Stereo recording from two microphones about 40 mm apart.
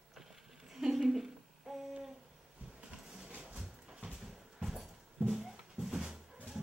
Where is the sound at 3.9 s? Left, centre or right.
Centre.